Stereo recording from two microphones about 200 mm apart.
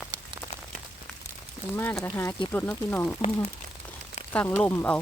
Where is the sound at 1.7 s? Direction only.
10° left (ahead or behind).